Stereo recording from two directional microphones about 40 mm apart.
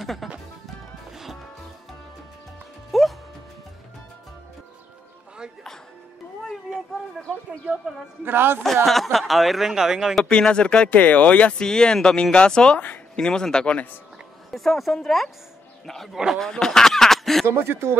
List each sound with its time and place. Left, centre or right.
0.0 s music: centre
2.9 s music: centre
6.5 s cat: centre
8.2 s speech: right
8.8 s a woman's voice: centre
10.2 s speech: left
10.9 s speech: left
11.5 s speech: centre
12.7 s speech: left
13.1 s speech: centre
14.5 s a woman's voice: centre
17.5 s speech: right